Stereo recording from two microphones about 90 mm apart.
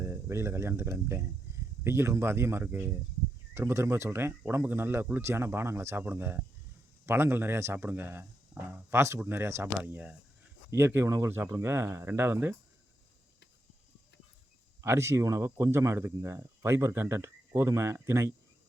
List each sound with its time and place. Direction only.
0.0 s speech: 30° right (ahead or behind)
10.7 s speech: 30° right (ahead or behind)
14.8 s speech: 30° right (ahead or behind)